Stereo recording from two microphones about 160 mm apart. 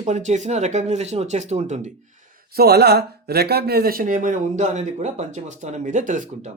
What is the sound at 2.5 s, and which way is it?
Speech, 80° right.